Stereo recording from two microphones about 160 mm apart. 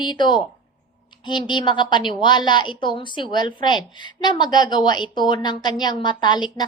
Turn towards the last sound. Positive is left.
turn(degrees=25)  # may be behind; listen again after turning